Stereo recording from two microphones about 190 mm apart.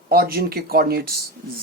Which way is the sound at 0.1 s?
55° right (ahead or behind).